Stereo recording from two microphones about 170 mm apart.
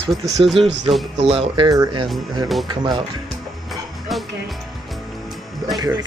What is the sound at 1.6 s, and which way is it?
Speech, 20° right (ahead or behind).